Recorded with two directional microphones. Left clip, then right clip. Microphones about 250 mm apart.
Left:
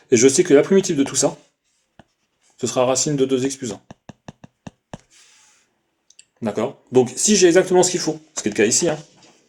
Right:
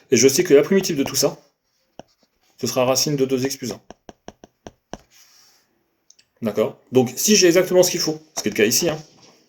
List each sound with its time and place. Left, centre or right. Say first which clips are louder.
0.1 s speech: left 1 dB; left
2.6 s speech: even; left
3.8 s a sound: right 1 dB; right
6.1 s clicking: left 3 dB; right
6.4 s speech: right 2 dB; left